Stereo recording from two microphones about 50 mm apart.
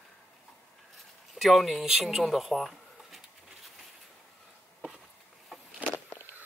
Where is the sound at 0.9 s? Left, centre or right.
Centre.